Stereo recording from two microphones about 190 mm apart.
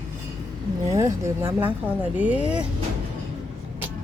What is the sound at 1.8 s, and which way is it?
Speech, 10° right (ahead or behind).